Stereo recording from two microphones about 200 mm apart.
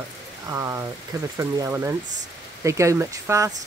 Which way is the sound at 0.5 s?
15° right (ahead or behind).